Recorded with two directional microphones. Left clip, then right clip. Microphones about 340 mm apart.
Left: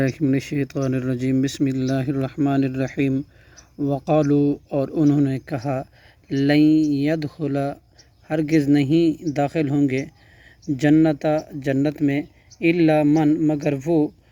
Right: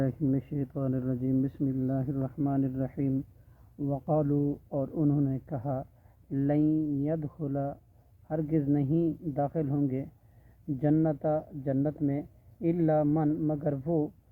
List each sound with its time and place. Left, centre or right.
0.0 s speech: left